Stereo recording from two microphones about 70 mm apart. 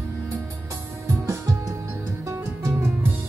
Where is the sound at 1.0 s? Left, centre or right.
Right.